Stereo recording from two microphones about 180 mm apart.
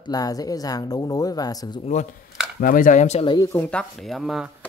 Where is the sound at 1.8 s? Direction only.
40° left (ahead or behind).